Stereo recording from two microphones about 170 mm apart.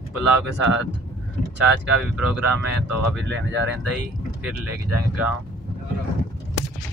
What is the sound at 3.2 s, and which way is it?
Speech, 90° right.